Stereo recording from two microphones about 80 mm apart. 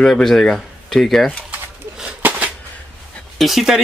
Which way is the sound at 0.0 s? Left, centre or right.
Centre.